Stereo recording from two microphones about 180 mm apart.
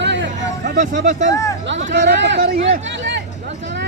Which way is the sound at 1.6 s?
85° right.